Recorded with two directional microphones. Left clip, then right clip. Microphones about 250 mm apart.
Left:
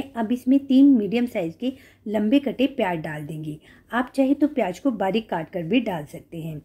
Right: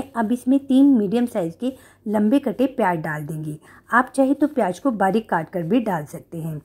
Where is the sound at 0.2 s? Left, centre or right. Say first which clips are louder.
Right 1 dB; centre.